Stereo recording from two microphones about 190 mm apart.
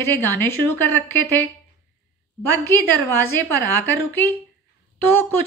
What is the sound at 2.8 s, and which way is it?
Speech, 90° right.